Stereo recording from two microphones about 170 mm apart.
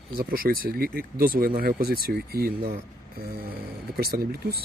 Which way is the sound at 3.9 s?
65° right (ahead or behind).